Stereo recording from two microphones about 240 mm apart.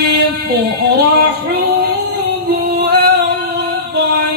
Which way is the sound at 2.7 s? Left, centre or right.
Right.